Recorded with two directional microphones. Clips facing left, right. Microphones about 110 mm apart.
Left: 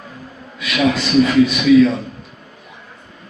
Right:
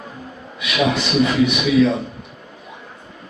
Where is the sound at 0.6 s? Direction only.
20° right (ahead or behind).